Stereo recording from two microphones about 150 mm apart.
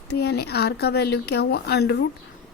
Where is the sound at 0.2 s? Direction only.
90° left.